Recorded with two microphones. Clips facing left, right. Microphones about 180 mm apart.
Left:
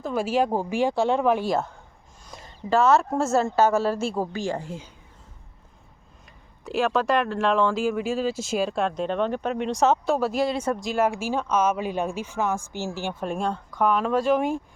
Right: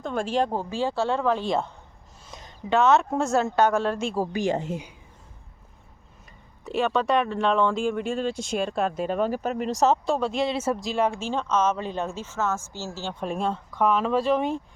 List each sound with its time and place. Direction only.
0.0 s a woman's voice: 5° left (ahead or behind)
1.5 s speech: centre (ahead or behind)
4.2 s speech: 15° right (ahead or behind)
6.7 s a woman's voice: centre (ahead or behind)
13.2 s speech: centre (ahead or behind)